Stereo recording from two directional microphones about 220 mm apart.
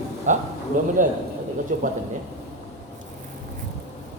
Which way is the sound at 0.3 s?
35° right (ahead or behind).